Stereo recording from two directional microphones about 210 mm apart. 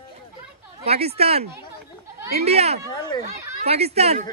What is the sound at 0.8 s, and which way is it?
Speech, 30° right (ahead or behind).